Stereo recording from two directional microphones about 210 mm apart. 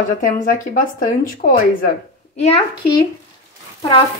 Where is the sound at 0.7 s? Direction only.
40° left (ahead or behind).